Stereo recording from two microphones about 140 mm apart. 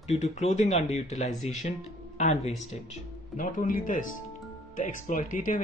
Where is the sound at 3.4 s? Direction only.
75° left (ahead or behind).